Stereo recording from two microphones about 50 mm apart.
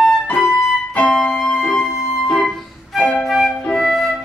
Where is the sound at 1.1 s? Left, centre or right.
Centre.